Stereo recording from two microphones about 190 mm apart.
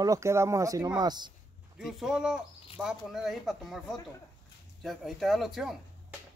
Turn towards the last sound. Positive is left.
turn(degrees=0)  # may be behind; listen again after turning